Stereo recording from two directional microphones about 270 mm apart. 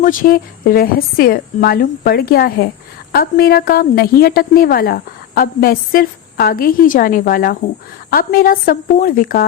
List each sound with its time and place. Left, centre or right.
0.0 s a woman's voice: left